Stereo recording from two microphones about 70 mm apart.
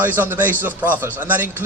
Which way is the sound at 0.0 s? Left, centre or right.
Right.